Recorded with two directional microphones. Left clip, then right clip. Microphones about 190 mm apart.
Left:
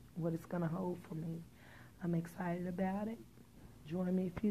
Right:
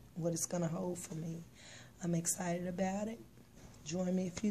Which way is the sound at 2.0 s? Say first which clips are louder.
Right 3 dB; 20° right (ahead or behind).